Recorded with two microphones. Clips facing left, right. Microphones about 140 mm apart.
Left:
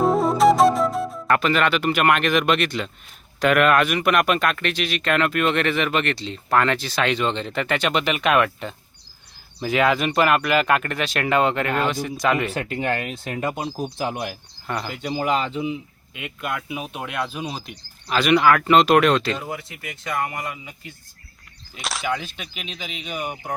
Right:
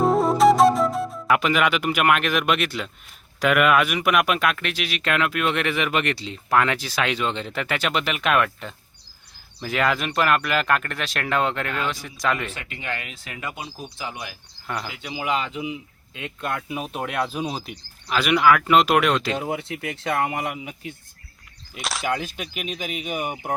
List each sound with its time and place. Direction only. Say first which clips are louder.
0.0 s flute: even; centre (ahead or behind)
1.4 s speech: left 1 dB; 10° right (ahead or behind)
12.5 s speech: left 8 dB; 40° left (ahead or behind)
14.7 s speech: left 2 dB; centre (ahead or behind)
14.9 s speech: left 4 dB; 45° left (ahead or behind); by 15.8 s 30° left (ahead or behind)
16.4 s speech: even; 5° left (ahead or behind); by 19.5 s 10° right (ahead or behind)
19.5 s speech: right 5 dB; 70° right (ahead or behind)
21.8 s speech: even; centre (ahead or behind)
23.0 s speech: left 1 dB; 20° right (ahead or behind)